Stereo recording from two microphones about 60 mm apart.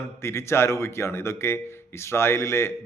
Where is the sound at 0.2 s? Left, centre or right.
Left.